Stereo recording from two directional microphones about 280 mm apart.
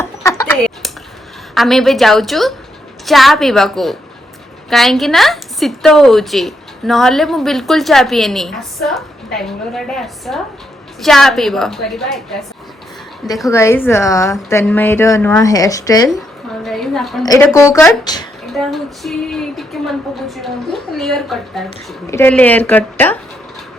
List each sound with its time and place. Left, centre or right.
0.0 s a sound: centre
1.5 s a woman's voice: centre
13.5 s a woman's voice: centre
16.6 s a woman's voice: centre
17.2 s a woman's voice: centre
18.4 s a woman's voice: centre